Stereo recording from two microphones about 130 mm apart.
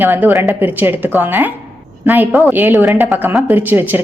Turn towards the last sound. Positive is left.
turn(degrees=-15)  # may be behind; listen again after turning